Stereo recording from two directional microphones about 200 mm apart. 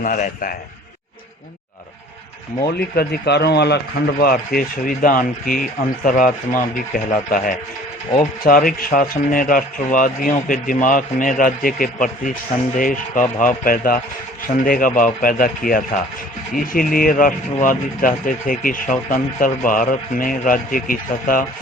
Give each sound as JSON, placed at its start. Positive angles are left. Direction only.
{"t": 0.0, "sound": "speech", "side_deg": 45}
{"t": 2.6, "sound": "speech", "side_deg": 50}